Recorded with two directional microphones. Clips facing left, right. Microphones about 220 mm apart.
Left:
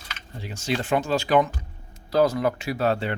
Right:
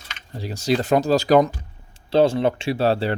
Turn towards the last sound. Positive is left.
turn(degrees=-35)  # may be behind; listen again after turning